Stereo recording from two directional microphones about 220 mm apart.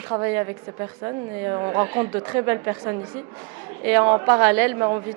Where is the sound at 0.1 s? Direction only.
15° right (ahead or behind).